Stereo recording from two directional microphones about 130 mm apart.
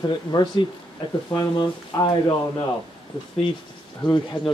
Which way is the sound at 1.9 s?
30° left (ahead or behind).